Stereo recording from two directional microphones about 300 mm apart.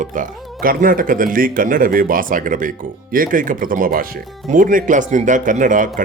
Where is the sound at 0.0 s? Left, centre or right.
Right.